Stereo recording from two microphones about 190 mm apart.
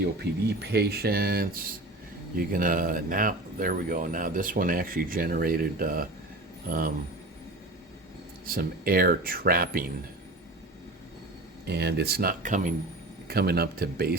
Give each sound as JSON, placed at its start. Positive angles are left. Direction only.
{"t": 0.0, "sound": "speech", "side_deg": -60}
{"t": 8.4, "sound": "speech", "side_deg": -50}
{"t": 11.7, "sound": "speech", "side_deg": -60}
{"t": 13.2, "sound": "speech", "side_deg": -55}